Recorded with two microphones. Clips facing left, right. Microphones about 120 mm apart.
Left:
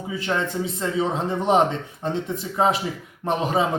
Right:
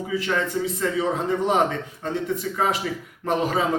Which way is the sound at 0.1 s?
25° left (ahead or behind).